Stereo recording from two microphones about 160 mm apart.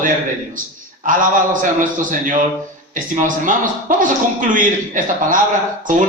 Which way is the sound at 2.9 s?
55° right (ahead or behind).